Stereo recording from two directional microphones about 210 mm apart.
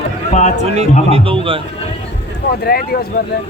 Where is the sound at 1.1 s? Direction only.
25° right (ahead or behind).